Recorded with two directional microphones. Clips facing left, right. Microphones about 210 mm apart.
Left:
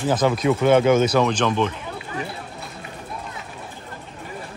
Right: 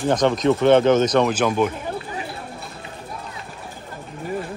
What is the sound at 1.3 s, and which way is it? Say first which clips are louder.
Speech: right 1 dB; 10° right (ahead or behind).